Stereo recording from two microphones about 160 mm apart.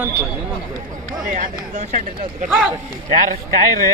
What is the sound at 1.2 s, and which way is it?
Speech, 50° right (ahead or behind).